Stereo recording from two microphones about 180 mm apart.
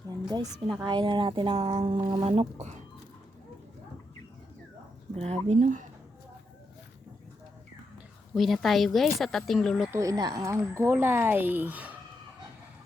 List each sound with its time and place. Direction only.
0.1 s a sound: 25° right (ahead or behind)
0.9 s speech: 25° right (ahead or behind)
5.1 s speech: 35° right (ahead or behind)
8.4 s speech: centre (ahead or behind)
9.9 s speech: 20° right (ahead or behind)